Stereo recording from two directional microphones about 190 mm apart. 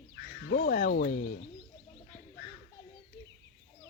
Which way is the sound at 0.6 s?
40° left (ahead or behind).